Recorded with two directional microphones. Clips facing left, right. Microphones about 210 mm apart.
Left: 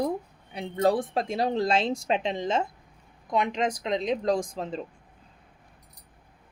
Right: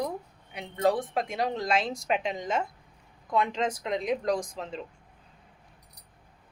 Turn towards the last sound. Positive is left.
turn(degrees=35)  # may be behind; listen again after turning